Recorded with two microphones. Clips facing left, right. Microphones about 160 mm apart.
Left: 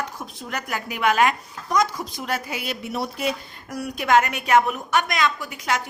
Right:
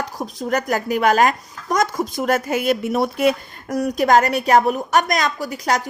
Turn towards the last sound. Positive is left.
turn(degrees=-40)  # may be behind; listen again after turning